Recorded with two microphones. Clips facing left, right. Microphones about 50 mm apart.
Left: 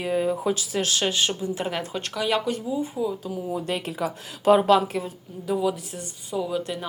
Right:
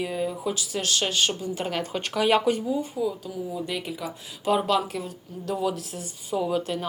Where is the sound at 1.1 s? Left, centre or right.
Centre.